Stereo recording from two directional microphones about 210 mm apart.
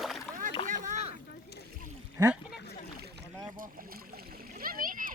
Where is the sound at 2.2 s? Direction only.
15° right (ahead or behind).